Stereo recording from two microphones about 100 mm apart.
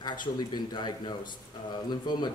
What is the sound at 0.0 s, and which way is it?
Speech, 50° left (ahead or behind).